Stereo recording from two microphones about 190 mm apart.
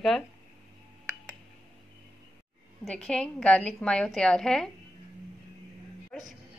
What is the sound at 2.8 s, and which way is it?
A woman's voice, 5° left (ahead or behind).